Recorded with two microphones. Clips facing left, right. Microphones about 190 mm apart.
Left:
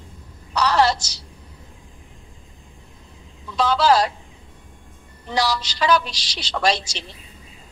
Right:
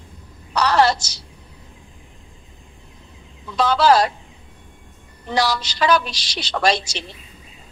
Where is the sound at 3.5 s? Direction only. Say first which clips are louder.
Right 2 dB; 55° right (ahead or behind).